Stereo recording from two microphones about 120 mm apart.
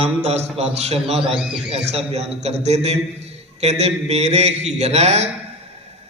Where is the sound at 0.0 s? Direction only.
65° right (ahead or behind).